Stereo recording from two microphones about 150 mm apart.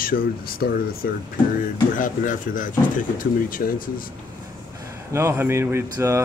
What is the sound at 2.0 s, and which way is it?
Speech, 60° left (ahead or behind).